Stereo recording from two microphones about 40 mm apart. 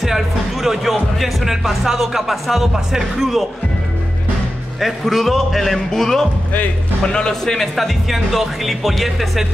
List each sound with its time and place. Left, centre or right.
0.0 s music: centre
1.1 s speech: centre
4.7 s speech: centre
7.5 s speech: centre